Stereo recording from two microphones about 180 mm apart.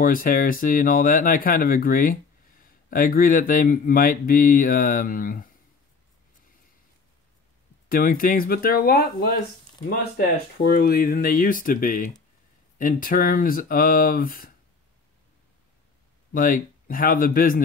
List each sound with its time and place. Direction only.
0.0 s speech: 50° left (ahead or behind)
7.9 s speech: 55° left (ahead or behind)
16.3 s speech: 50° left (ahead or behind)